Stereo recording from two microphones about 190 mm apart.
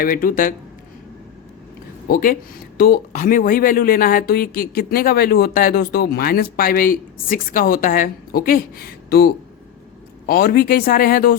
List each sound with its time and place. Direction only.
0.0 s speech: 45° left (ahead or behind)
2.0 s speech: 50° left (ahead or behind)